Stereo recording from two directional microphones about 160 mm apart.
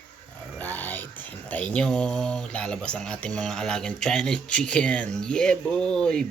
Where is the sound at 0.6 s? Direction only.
10° left (ahead or behind).